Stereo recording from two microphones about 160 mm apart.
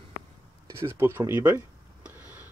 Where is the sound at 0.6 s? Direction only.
15° right (ahead or behind).